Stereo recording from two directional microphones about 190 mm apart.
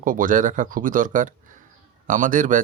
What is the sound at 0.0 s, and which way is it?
Speech, 45° right (ahead or behind).